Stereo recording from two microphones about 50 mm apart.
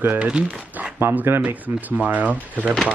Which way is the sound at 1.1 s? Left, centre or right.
Right.